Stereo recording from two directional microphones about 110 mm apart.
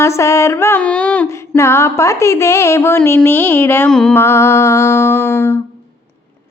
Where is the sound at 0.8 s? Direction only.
10° left (ahead or behind).